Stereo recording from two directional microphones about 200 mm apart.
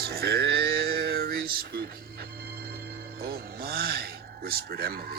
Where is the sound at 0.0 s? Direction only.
50° right (ahead or behind).